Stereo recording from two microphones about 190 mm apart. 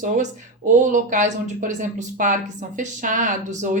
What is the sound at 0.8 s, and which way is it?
A woman's voice, 40° right (ahead or behind).